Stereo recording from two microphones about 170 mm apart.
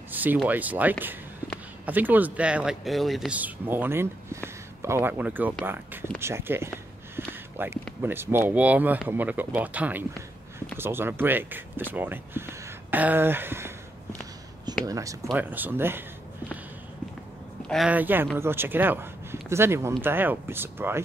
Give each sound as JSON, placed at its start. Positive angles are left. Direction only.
{"t": 0.1, "sound": "speech", "side_deg": -10}
{"t": 7.2, "sound": "a sound", "side_deg": -15}
{"t": 8.0, "sound": "speech", "side_deg": -15}
{"t": 14.9, "sound": "speech", "side_deg": -20}
{"t": 17.6, "sound": "speech", "side_deg": -5}